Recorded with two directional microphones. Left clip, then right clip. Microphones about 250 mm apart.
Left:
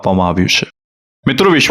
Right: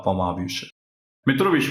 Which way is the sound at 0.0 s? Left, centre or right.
Left.